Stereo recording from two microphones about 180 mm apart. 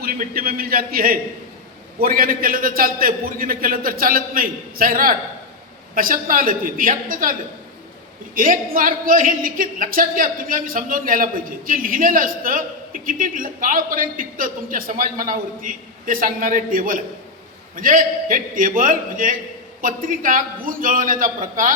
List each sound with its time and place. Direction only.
0.0 s speech: 55° right (ahead or behind)
8.4 s speech: 50° right (ahead or behind)